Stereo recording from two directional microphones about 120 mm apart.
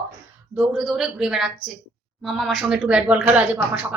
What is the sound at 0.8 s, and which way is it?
A man's voice, 5° right (ahead or behind).